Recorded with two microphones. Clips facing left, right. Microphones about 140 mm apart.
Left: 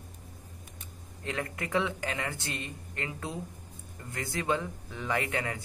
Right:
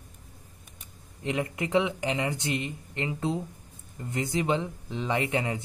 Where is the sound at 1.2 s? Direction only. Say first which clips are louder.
Right 5 dB; 20° right (ahead or behind).